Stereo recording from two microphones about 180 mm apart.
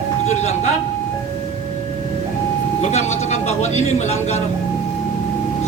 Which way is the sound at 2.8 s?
40° left (ahead or behind).